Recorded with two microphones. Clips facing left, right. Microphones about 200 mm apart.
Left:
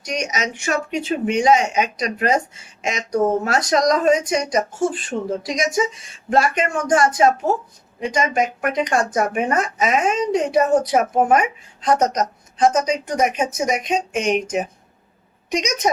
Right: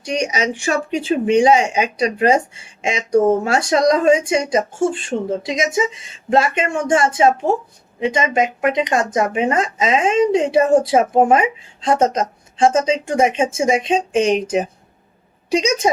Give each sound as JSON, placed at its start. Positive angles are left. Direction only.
{"t": 0.0, "sound": "a woman's voice", "side_deg": -30}